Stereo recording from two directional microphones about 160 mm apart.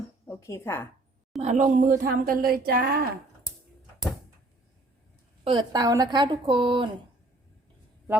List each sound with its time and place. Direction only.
0.3 s speech: 15° left (ahead or behind)
1.4 s speech: 45° right (ahead or behind); by 3.1 s 70° right (ahead or behind)
5.5 s a woman's voice: 25° right (ahead or behind)